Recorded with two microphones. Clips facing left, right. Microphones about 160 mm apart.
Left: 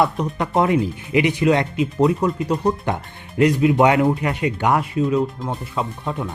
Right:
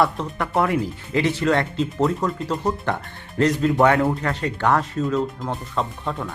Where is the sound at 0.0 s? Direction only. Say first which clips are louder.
Left 2 dB; 20° left (ahead or behind).